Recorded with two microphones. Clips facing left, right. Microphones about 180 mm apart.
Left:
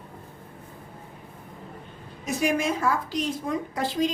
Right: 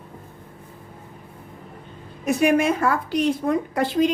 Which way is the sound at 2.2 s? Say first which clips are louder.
Right 7 dB; 60° right (ahead or behind).